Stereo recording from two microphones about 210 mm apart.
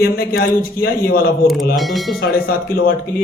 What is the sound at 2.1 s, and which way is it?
Speech, 45° left (ahead or behind).